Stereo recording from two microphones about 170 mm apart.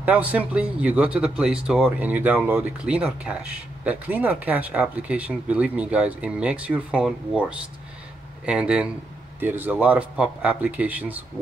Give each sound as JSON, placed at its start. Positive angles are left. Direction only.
{"t": 0.0, "sound": "a man's voice", "side_deg": -10}